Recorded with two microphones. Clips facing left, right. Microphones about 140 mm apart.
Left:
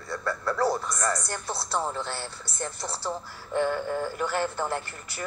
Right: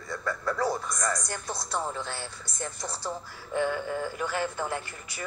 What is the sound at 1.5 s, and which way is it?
Speech, 30° left (ahead or behind).